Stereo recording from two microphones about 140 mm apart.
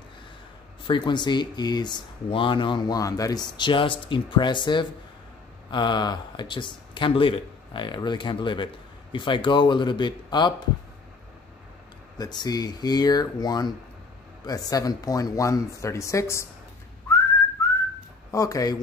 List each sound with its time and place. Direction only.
0.8 s speech: 35° left (ahead or behind)
12.2 s speech: 30° left (ahead or behind)
18.3 s speech: 25° left (ahead or behind)